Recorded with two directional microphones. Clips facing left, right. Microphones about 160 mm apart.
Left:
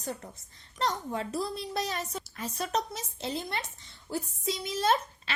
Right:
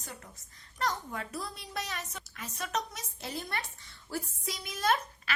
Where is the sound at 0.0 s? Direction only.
35° left (ahead or behind).